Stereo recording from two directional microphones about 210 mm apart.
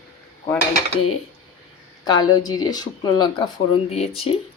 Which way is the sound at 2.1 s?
20° left (ahead or behind).